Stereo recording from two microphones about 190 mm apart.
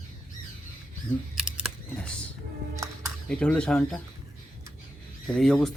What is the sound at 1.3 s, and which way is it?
Camera, centre (ahead or behind).